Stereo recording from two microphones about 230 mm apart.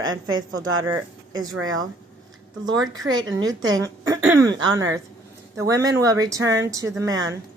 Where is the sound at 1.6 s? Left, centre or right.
Right.